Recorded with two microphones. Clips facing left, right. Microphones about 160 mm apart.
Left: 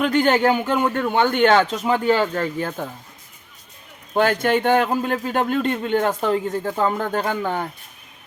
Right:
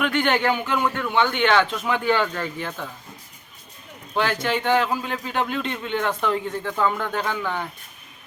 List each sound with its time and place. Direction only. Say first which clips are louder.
0.0 s speech: left 4 dB; 35° left (ahead or behind)
4.1 s speech: left 5 dB; 45° left (ahead or behind)